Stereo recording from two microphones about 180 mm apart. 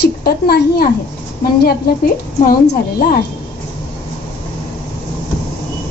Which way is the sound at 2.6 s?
50° left (ahead or behind).